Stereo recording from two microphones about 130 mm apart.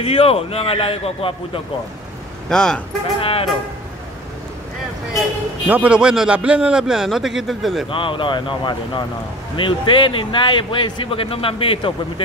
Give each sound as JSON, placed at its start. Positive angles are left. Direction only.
{"t": 0.0, "sound": "a man's voice", "side_deg": 45}
{"t": 2.5, "sound": "a man's voice", "side_deg": 5}
{"t": 3.2, "sound": "a man's voice", "side_deg": 45}
{"t": 5.7, "sound": "a man's voice", "side_deg": -10}
{"t": 7.9, "sound": "speech", "side_deg": 40}